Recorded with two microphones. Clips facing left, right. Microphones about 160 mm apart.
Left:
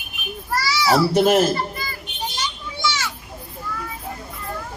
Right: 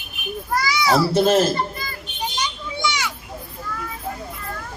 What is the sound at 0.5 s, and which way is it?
Speech, 15° right (ahead or behind).